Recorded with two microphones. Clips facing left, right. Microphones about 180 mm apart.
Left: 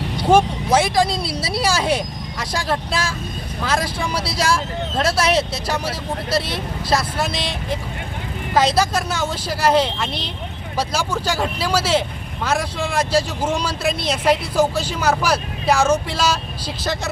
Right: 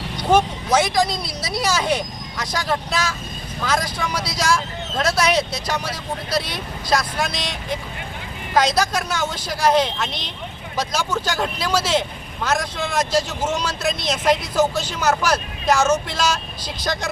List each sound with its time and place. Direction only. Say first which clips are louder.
0.2 s speech: left 2 dB; 5° left (ahead or behind)
1.0 s a woman's voice: left 3 dB; 30° left (ahead or behind)
1.6 s speech: left 1 dB; 5° left (ahead or behind)
2.9 s speech: even; 30° left (ahead or behind)
3.6 s speech: left 1 dB; 5° left (ahead or behind)
4.1 s speech: left 2 dB; 30° left (ahead or behind)
4.4 s speech: left 1 dB; 5° left (ahead or behind)
6.9 s speech: left 1 dB; 5° left (ahead or behind)